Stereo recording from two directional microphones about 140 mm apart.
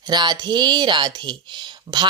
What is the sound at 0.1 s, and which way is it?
Speech, 30° right (ahead or behind).